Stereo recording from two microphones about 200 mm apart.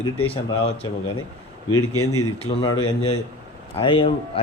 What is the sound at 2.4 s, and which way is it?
Speech, 30° left (ahead or behind).